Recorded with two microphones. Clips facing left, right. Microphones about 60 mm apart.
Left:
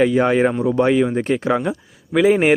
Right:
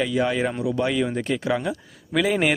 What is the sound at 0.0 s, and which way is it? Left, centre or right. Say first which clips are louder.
Speech: left 7 dB; left.